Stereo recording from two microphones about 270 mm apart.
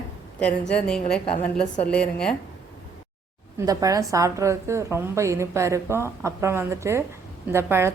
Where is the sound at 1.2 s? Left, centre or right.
Left.